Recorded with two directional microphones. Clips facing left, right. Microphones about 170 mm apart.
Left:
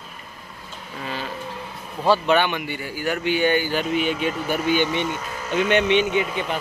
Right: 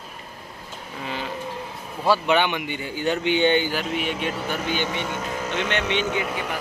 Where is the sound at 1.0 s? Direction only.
15° right (ahead or behind).